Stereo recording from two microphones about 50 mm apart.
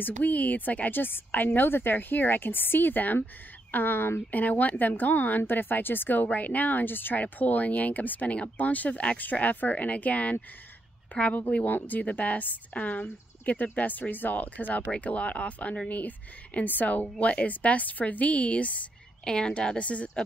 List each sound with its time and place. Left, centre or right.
0.0 s speech: left
6.2 s speech: left
11.6 s speech: left
19.2 s a woman's voice: centre